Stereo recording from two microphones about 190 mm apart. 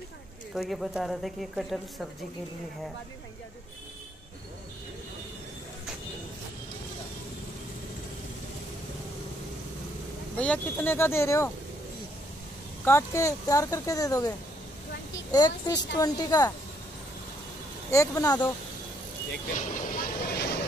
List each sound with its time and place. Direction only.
0.6 s a woman's voice: centre (ahead or behind)
10.3 s speech: 5° left (ahead or behind)
12.8 s speech: 15° left (ahead or behind)
15.3 s a woman's voice: 20° left (ahead or behind)
17.9 s a woman's voice: 20° left (ahead or behind)
19.5 s vehicle: 45° left (ahead or behind)